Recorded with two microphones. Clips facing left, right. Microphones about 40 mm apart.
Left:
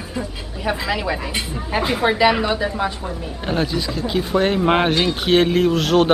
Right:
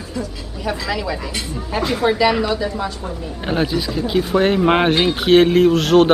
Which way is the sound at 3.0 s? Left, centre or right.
Centre.